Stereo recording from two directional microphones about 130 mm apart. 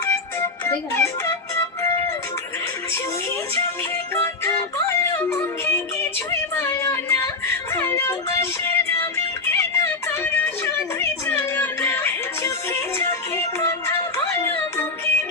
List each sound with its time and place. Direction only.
0.0 s music: 20° left (ahead or behind)
4.1 s music: 20° left (ahead or behind)